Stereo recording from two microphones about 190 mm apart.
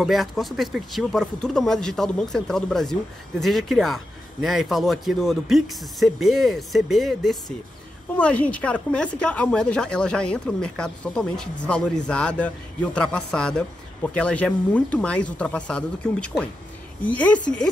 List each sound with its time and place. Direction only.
0.0 s a woman's voice: centre (ahead or behind)